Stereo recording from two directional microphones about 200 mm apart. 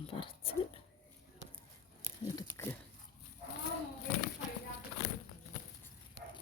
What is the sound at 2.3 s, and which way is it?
Speech, 15° left (ahead or behind).